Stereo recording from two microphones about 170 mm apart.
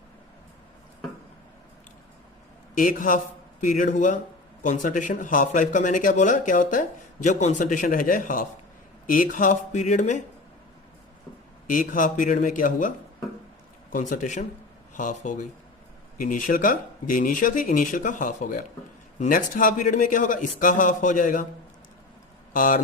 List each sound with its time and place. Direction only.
2.7 s speech: 50° left (ahead or behind)
11.7 s speech: 50° left (ahead or behind)
13.9 s speech: 50° left (ahead or behind)
22.5 s speech: 55° left (ahead or behind)